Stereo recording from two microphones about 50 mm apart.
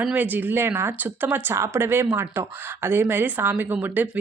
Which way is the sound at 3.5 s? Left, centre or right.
Right.